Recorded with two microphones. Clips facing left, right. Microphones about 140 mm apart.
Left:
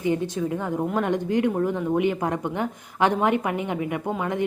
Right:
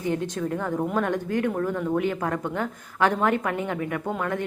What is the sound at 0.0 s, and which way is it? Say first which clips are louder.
Speech: left 2 dB; 10° left (ahead or behind).